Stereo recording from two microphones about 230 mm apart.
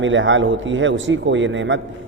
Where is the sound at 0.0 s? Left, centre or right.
Right.